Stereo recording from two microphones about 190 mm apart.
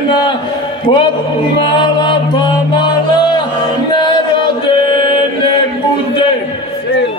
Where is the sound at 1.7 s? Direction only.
25° left (ahead or behind).